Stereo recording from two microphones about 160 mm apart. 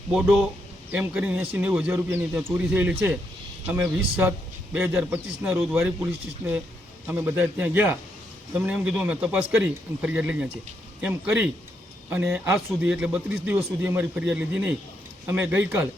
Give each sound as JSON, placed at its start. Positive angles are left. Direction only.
{"t": 0.1, "sound": "a man's voice", "side_deg": -5}